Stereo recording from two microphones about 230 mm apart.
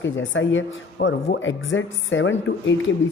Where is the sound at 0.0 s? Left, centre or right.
Left.